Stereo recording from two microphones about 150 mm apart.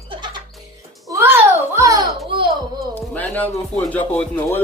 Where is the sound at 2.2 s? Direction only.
35° right (ahead or behind).